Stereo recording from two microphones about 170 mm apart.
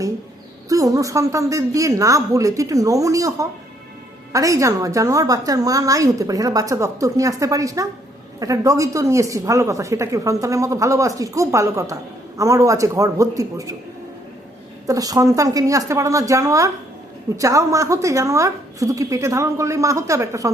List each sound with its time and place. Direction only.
0.7 s a woman's voice: 20° right (ahead or behind)
14.8 s a woman's voice: 20° right (ahead or behind)